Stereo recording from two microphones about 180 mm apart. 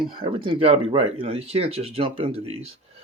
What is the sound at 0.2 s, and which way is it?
Speech, 25° right (ahead or behind).